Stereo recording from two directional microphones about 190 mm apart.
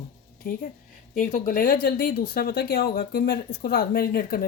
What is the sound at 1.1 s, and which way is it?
Speech, 45° left (ahead or behind).